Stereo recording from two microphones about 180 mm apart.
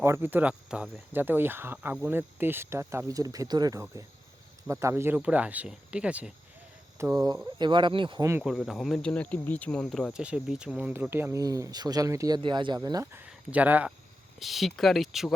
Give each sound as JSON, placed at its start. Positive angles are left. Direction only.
{"t": 0.0, "sound": "speech", "side_deg": -15}
{"t": 7.2, "sound": "speech", "side_deg": -20}
{"t": 8.3, "sound": "speech", "side_deg": -5}